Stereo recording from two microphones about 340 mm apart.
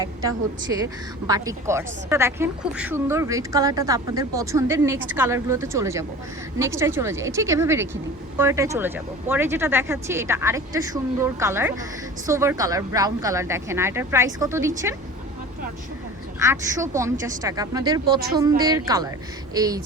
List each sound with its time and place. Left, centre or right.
1.3 s speech: centre
16.4 s speech: centre